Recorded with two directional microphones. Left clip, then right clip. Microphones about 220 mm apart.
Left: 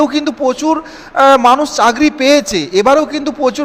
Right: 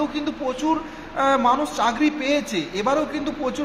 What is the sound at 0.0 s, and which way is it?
A man's voice, 45° left (ahead or behind).